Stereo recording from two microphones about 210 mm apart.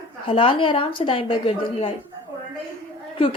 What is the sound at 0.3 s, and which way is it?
Speech, 25° left (ahead or behind).